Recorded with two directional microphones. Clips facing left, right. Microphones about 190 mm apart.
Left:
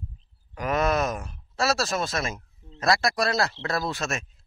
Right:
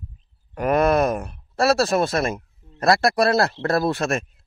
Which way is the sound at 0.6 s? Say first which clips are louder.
Right 6 dB; 55° right (ahead or behind).